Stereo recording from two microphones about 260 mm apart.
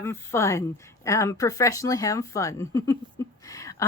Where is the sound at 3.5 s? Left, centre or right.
Centre.